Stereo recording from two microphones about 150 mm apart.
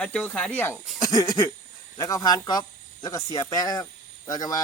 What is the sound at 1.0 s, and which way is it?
Speech, 25° left (ahead or behind).